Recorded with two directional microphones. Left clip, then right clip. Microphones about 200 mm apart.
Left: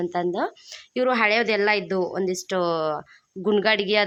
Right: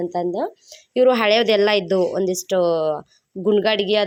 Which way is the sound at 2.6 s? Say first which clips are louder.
Right 5 dB; centre (ahead or behind).